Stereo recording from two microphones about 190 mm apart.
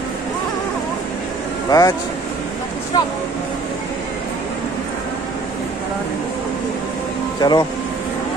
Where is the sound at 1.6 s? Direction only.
20° left (ahead or behind).